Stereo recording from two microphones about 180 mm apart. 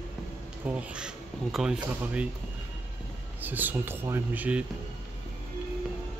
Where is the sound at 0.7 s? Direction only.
5° right (ahead or behind).